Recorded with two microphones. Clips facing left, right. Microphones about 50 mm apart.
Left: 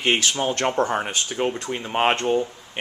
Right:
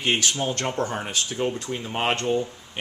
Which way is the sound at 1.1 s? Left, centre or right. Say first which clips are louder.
Left 2 dB; left.